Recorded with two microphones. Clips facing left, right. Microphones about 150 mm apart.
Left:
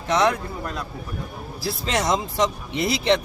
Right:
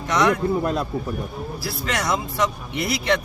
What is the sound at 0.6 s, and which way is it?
Speech, 25° right (ahead or behind).